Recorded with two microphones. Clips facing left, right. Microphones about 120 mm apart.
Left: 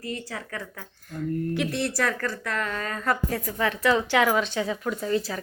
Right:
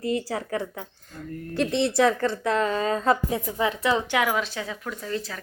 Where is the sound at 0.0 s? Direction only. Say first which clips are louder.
Right 7 dB; 25° right (ahead or behind).